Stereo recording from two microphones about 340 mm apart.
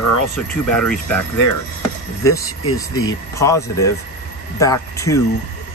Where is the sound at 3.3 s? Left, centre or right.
Centre.